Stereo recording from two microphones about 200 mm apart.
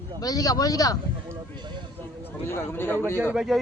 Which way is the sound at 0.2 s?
20° left (ahead or behind).